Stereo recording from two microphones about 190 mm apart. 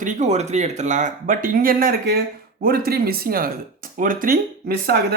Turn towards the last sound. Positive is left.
turn(degrees=-55)  # may be behind; listen again after turning